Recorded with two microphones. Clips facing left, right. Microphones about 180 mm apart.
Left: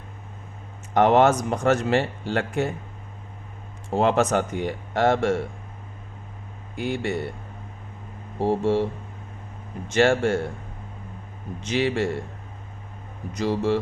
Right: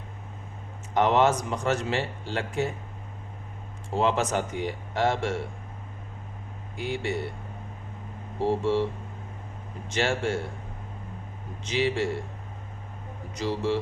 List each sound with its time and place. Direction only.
0.9 s speech: 50° left (ahead or behind)
3.9 s speech: 50° left (ahead or behind)
6.7 s speech: 55° left (ahead or behind)
8.4 s speech: 50° left (ahead or behind)
9.9 s speech: 50° left (ahead or behind)
11.7 s speech: 50° left (ahead or behind)
13.3 s speech: 50° left (ahead or behind)